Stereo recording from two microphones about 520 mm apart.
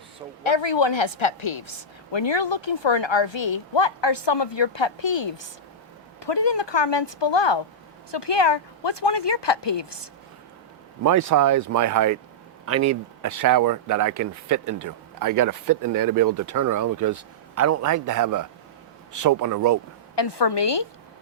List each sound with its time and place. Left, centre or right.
0.4 s a woman's voice: left
11.0 s speech: right
20.1 s a woman's voice: left